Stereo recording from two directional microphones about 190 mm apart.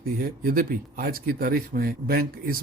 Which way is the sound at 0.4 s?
50° right (ahead or behind).